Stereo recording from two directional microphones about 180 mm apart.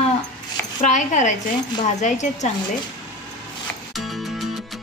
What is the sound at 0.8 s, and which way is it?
A woman's voice, 40° left (ahead or behind).